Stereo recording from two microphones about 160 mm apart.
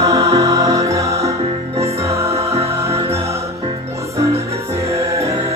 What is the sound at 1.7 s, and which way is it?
Music, 40° right (ahead or behind).